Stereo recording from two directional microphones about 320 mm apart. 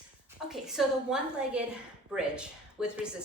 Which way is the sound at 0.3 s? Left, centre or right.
Centre.